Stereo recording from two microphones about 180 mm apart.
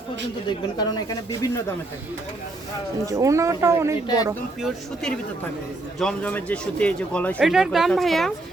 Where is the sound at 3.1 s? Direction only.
15° right (ahead or behind).